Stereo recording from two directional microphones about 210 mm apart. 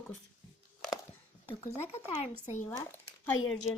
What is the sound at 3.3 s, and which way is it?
Speech, 70° left (ahead or behind).